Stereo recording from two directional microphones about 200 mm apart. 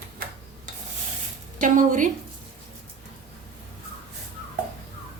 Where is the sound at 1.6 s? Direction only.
40° right (ahead or behind).